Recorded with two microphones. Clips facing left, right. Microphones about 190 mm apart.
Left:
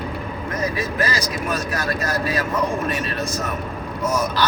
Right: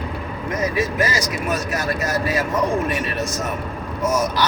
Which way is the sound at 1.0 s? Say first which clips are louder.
Right 1 dB; 20° right (ahead or behind).